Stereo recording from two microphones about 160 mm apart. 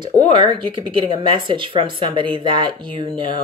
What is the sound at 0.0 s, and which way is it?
Speech, 30° right (ahead or behind).